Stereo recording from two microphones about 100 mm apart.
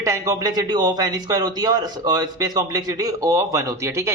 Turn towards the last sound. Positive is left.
turn(degrees=-30)  # may be behind; listen again after turning